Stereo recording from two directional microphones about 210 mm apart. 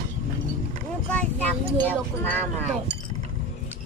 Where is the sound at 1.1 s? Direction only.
10° left (ahead or behind).